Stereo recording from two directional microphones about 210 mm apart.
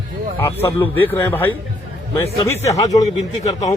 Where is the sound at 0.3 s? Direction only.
10° left (ahead or behind).